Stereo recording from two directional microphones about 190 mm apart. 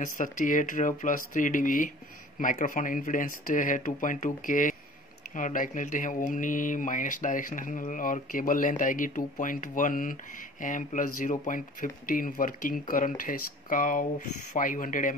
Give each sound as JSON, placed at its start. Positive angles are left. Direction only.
{"t": 0.0, "sound": "speech", "side_deg": 45}